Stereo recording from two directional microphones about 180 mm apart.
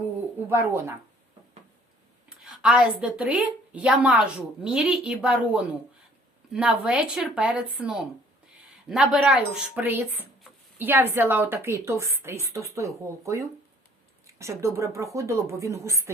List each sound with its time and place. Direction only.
0.3 s bird: 10° right (ahead or behind)
2.4 s a woman's voice: 5° right (ahead or behind)